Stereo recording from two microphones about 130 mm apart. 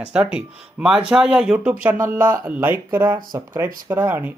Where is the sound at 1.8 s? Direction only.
15° right (ahead or behind).